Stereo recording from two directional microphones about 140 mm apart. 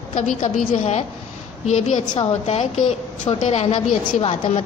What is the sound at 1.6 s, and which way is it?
A woman's voice, 60° left (ahead or behind).